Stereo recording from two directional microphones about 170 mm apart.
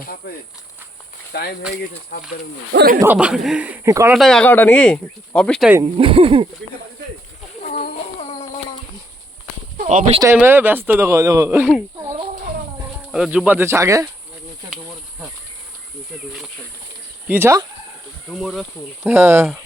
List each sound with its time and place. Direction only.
1.3 s speech: 70° left (ahead or behind)
2.7 s a man's voice: 60° right (ahead or behind)
3.0 s speech: 10° right (ahead or behind)
3.8 s speech: 20° right (ahead or behind)
4.1 s speech: centre (ahead or behind)
5.8 s speech: 30° right (ahead or behind)
7.7 s a sound: 40° left (ahead or behind)
9.8 s speech: 40° right (ahead or behind)
10.3 s speech: 10° right (ahead or behind)
13.1 s speech: 5° right (ahead or behind)
16.1 s speech: centre (ahead or behind)
17.2 s speech: 10° right (ahead or behind)
18.3 s speech: centre (ahead or behind)
19.0 s speech: 15° right (ahead or behind)